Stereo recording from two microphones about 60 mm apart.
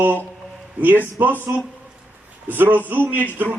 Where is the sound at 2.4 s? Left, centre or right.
Right.